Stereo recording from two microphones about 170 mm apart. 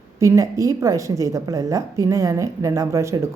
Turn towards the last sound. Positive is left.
turn(degrees=-15)  # may be behind; listen again after turning